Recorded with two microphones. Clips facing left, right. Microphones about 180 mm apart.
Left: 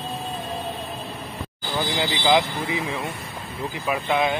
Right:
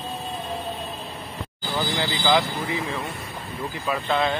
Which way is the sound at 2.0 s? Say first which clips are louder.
Left 2 dB; 20° left (ahead or behind).